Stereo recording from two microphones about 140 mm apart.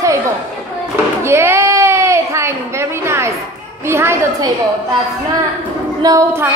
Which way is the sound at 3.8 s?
20° right (ahead or behind).